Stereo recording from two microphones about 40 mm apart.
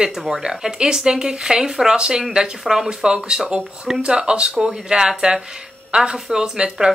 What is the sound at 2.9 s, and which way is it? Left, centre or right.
A woman's voice, centre.